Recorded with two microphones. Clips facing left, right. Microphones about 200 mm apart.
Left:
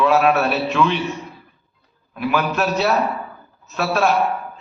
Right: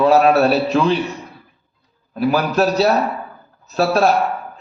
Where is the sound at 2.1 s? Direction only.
35° right (ahead or behind).